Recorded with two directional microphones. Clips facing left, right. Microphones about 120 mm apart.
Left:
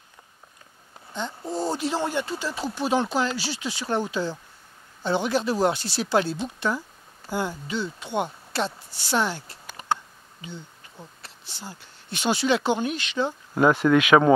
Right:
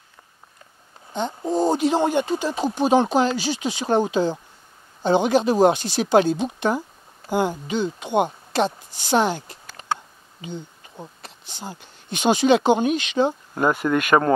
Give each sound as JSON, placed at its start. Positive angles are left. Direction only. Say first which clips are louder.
{"t": 1.1, "sound": "speech", "louder": "right 7 dB", "side_deg": -20}
{"t": 13.6, "sound": "speech", "louder": "left 2 dB", "side_deg": -5}